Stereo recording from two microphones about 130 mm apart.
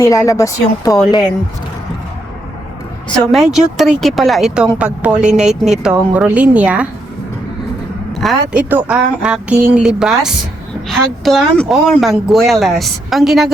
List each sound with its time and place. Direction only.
0.0 s speech: 25° left (ahead or behind)
3.1 s speech: centre (ahead or behind)
8.2 s speech: centre (ahead or behind)